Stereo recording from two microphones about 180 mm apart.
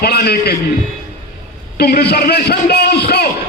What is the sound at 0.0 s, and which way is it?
Speech, 65° left (ahead or behind).